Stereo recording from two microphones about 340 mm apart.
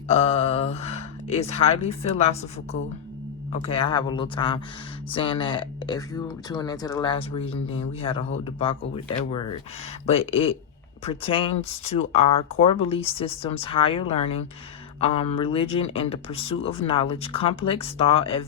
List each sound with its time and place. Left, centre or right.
0.1 s speech: centre
3.5 s speech: centre
9.3 s speech: left
10.1 s speech: centre